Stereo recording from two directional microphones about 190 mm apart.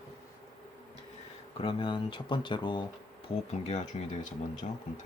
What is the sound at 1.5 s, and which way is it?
Speech, 30° left (ahead or behind).